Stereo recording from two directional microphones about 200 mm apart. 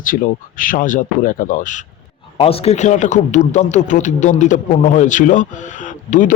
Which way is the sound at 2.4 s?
30° left (ahead or behind).